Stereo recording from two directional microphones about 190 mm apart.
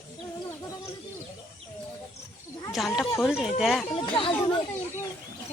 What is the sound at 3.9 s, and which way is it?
Speech, 25° left (ahead or behind).